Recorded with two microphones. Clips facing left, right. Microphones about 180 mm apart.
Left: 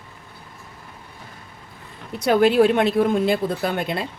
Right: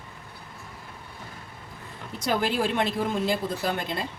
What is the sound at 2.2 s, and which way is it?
Speech, 60° left (ahead or behind).